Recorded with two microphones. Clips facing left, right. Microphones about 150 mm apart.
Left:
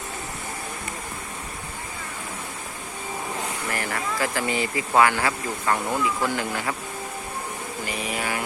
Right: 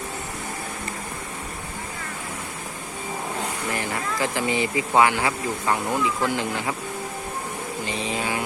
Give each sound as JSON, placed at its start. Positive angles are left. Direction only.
{"t": 3.7, "sound": "speech", "side_deg": -20}
{"t": 7.9, "sound": "vehicle", "side_deg": -25}